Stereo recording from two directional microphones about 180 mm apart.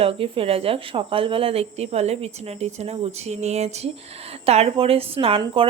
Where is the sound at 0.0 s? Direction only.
30° right (ahead or behind).